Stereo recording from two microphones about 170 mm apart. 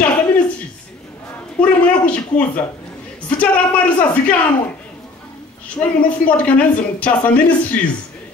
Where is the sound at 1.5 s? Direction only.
10° left (ahead or behind).